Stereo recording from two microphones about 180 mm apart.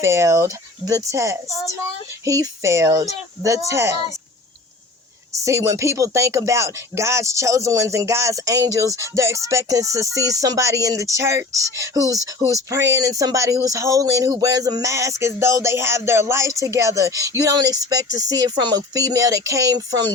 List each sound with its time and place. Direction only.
0.0 s speech: 15° right (ahead or behind)
1.5 s speech: 15° left (ahead or behind)
2.2 s speech: 20° right (ahead or behind)
5.4 s speech: 15° right (ahead or behind)